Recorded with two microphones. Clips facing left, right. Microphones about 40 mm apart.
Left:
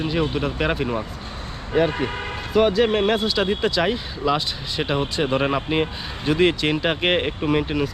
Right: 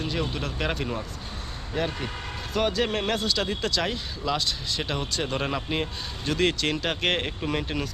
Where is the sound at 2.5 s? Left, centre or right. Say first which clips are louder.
Left 8 dB; centre.